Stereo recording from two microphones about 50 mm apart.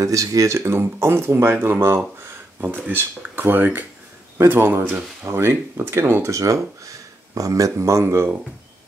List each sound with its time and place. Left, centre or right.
0.0 s speech: right
8.0 s speech: right